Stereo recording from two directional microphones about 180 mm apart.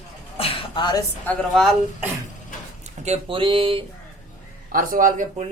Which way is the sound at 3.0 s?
35° right (ahead or behind).